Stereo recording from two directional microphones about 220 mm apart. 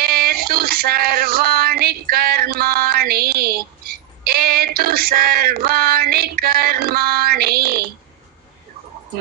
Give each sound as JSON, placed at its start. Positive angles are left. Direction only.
{"t": 0.0, "sound": "male singing", "side_deg": -45}